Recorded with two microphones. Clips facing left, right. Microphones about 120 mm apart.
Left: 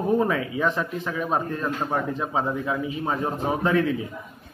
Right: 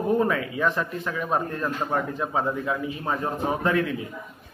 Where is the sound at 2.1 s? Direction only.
20° left (ahead or behind).